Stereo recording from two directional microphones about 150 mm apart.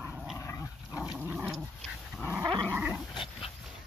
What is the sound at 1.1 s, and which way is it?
Dog, 10° right (ahead or behind).